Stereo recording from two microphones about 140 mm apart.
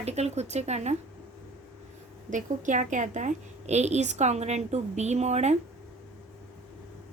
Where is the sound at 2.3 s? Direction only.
65° right (ahead or behind).